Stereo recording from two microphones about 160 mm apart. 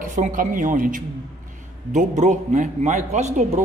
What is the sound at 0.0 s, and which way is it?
A man's voice, 55° right (ahead or behind).